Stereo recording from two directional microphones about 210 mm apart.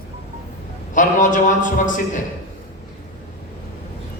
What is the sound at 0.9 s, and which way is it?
Speech, 35° left (ahead or behind).